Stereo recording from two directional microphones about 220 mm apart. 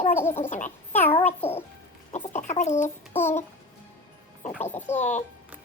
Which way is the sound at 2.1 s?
30° left (ahead or behind).